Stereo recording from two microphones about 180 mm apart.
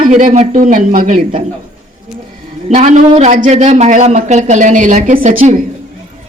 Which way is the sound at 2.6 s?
40° right (ahead or behind).